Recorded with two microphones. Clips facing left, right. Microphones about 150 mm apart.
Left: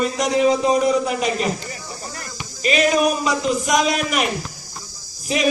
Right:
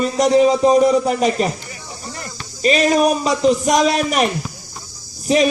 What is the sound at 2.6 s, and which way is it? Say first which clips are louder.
A man's voice: right 3 dB; 35° right (ahead or behind).